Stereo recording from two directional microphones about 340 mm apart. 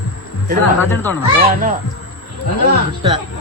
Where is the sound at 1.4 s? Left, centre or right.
Right.